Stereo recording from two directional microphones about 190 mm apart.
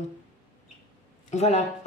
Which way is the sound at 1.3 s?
35° left (ahead or behind).